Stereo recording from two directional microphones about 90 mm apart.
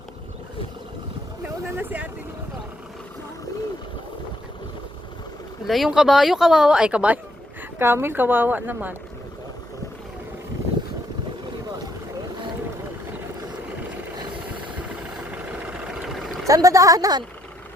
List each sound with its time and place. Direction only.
1.6 s speech: 25° right (ahead or behind)
5.6 s speech: centre (ahead or behind)
7.8 s speech: 25° right (ahead or behind)
15.9 s vehicle: 5° right (ahead or behind)
16.5 s a woman's voice: 40° right (ahead or behind)